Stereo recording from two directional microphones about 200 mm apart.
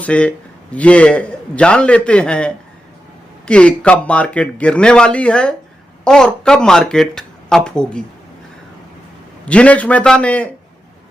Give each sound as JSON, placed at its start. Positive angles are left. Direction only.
{"t": 0.0, "sound": "a man's voice", "side_deg": 5}
{"t": 9.5, "sound": "a man's voice", "side_deg": 5}